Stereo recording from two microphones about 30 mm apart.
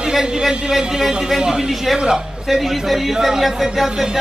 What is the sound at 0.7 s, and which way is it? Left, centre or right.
A woman's voice, right.